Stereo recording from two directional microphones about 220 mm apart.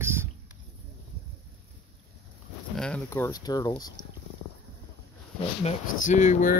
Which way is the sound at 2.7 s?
5° left (ahead or behind).